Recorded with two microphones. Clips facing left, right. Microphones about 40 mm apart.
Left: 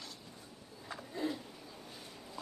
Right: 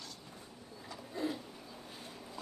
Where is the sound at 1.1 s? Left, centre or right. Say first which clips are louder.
Even; centre.